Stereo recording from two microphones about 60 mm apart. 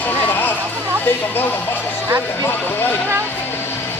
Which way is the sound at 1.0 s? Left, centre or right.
Left.